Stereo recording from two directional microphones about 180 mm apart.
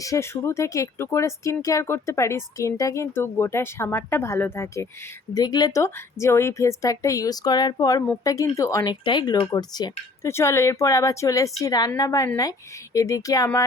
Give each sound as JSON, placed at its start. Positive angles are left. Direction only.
{"t": 0.0, "sound": "a woman's voice", "side_deg": 15}